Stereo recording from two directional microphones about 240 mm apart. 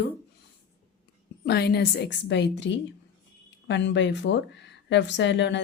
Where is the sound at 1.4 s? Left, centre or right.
Left.